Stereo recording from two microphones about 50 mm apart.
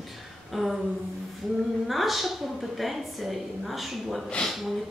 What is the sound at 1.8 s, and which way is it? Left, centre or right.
A woman's voice, centre.